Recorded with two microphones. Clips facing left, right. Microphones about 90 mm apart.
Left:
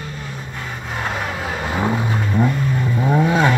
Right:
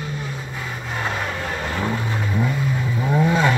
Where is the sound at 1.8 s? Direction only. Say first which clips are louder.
Left 6 dB; 25° left (ahead or behind).